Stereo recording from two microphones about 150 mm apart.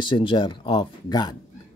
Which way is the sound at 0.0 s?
35° left (ahead or behind).